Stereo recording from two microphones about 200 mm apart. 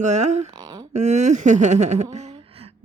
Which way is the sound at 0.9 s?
35° right (ahead or behind).